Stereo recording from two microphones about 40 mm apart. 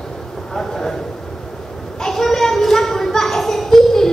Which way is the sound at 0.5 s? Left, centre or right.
Centre.